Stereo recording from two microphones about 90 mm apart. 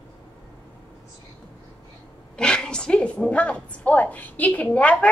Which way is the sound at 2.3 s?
10° left (ahead or behind).